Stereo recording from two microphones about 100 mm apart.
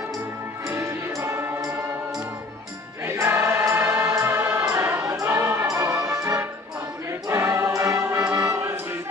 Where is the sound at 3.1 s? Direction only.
25° right (ahead or behind).